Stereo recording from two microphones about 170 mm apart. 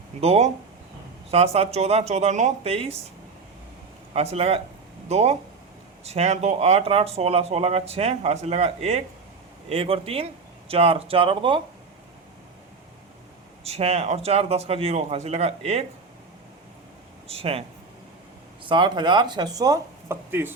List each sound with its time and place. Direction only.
0.2 s speech: 40° right (ahead or behind)
4.1 s speech: 35° right (ahead or behind)
13.7 s speech: 35° right (ahead or behind)
17.2 s speech: 35° right (ahead or behind)
18.6 s speech: 30° right (ahead or behind)